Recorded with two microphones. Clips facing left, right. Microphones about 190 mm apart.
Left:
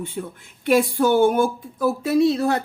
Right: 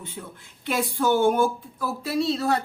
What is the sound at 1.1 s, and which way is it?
Speech, 50° left (ahead or behind).